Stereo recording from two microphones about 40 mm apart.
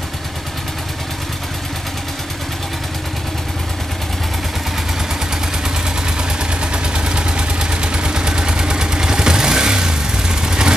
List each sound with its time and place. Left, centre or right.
6.6 s vehicle: right